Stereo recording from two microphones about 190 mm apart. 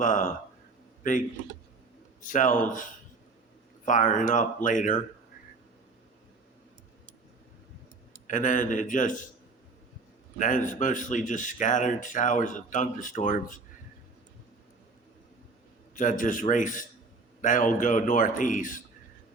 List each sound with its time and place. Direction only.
0.0 s speech: 45° left (ahead or behind)
2.2 s speech: 45° left (ahead or behind)
8.3 s speech: 40° left (ahead or behind)
10.3 s speech: 40° left (ahead or behind)
16.0 s speech: 45° left (ahead or behind)